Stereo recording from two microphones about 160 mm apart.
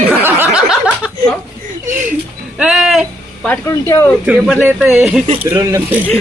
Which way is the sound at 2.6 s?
5° right (ahead or behind).